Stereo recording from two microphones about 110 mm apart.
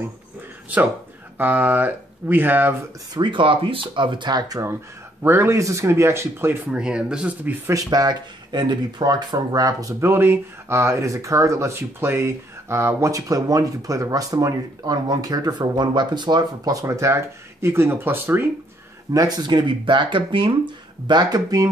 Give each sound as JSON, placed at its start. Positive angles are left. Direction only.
{"t": 1.4, "sound": "speech", "side_deg": -15}
{"t": 3.2, "sound": "speech", "side_deg": -50}
{"t": 5.2, "sound": "speech", "side_deg": -20}
{"t": 7.9, "sound": "speech", "side_deg": -40}
{"t": 19.1, "sound": "speech", "side_deg": -35}
{"t": 21.1, "sound": "speech", "side_deg": -40}